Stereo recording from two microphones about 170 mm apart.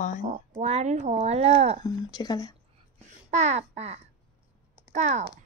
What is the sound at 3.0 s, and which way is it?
Babbling, 45° right (ahead or behind).